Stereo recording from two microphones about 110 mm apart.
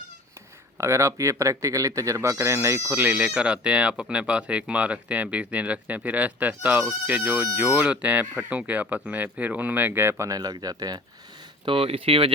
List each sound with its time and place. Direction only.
0.8 s speech: 25° right (ahead or behind)
11.6 s speech: 60° right (ahead or behind)